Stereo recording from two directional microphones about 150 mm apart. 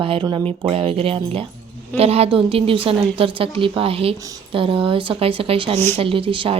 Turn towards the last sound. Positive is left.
turn(degrees=-35)  # may be behind; listen again after turning